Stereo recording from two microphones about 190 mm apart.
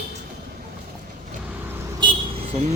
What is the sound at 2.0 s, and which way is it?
Vehicle, 25° right (ahead or behind).